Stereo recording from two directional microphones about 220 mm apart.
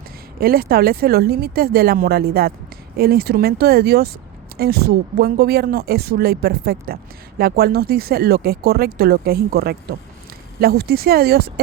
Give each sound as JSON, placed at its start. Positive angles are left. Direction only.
{"t": 0.3, "sound": "speech", "side_deg": -45}